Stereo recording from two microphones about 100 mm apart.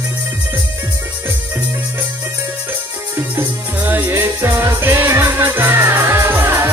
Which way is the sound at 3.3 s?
20° right (ahead or behind).